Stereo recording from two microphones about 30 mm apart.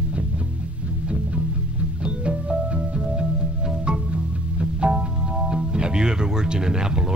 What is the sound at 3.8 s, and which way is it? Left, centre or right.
Music, right.